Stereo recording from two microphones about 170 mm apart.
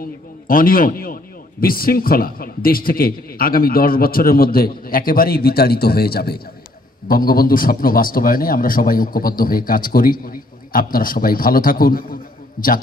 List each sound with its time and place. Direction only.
0.0 s a man's voice: 60° left (ahead or behind)